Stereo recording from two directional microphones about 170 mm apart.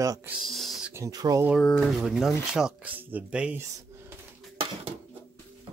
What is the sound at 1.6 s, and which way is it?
Speech, 5° left (ahead or behind).